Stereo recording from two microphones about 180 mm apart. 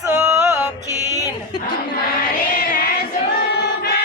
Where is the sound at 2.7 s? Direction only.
55° left (ahead or behind).